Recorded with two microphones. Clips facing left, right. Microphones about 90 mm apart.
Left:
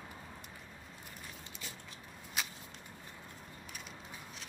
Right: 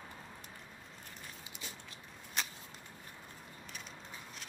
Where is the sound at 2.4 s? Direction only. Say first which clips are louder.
Even; 5° left (ahead or behind).